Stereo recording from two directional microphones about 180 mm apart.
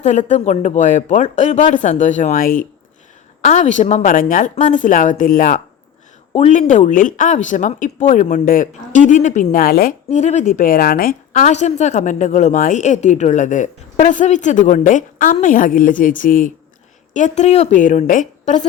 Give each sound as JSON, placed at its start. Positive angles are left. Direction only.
{"t": 0.0, "sound": "speech", "side_deg": 40}
{"t": 3.4, "sound": "speech", "side_deg": 40}
{"t": 6.3, "sound": "a woman's voice", "side_deg": 40}